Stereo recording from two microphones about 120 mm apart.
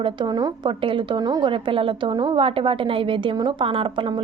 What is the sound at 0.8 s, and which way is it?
A woman's voice, 45° right (ahead or behind).